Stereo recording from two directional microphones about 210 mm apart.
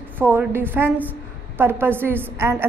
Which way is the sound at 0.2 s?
10° right (ahead or behind).